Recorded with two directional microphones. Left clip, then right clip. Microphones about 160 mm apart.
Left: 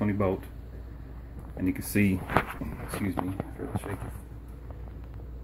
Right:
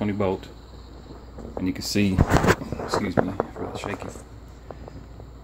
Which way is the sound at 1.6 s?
20° right (ahead or behind).